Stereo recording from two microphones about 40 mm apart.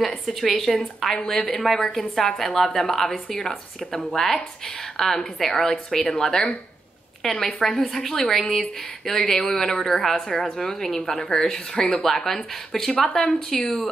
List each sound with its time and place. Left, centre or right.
0.0 s a woman's voice: centre
1.2 s a woman's voice: centre